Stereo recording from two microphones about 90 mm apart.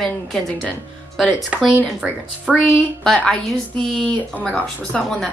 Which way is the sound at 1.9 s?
5° right (ahead or behind).